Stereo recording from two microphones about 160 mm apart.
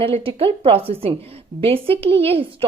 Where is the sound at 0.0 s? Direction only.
35° right (ahead or behind).